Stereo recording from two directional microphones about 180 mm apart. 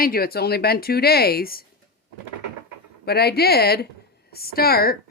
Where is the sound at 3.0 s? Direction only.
60° left (ahead or behind).